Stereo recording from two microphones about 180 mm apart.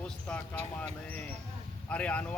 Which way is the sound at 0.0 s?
5° left (ahead or behind).